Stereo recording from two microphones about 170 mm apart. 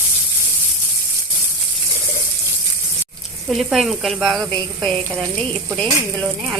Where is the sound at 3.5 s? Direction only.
Centre (ahead or behind).